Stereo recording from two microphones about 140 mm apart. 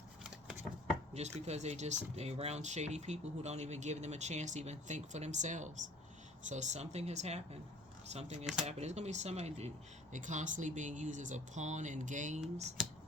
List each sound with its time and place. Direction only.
0.2 s shuffling cards: 5° right (ahead or behind)
1.1 s speech: 50° right (ahead or behind)